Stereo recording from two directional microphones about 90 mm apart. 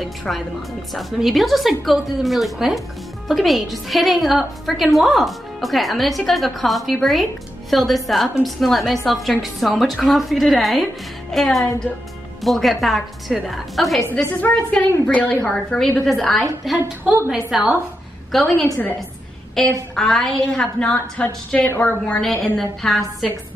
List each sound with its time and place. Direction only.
0.0 s a woman's voice: centre (ahead or behind)
14.4 s a woman's voice: 10° left (ahead or behind)
15.5 s a woman's voice: 5° left (ahead or behind)
19.6 s a woman's voice: 5° left (ahead or behind)
20.5 s a woman's voice: 15° left (ahead or behind)
22.0 s a woman's voice: 10° left (ahead or behind)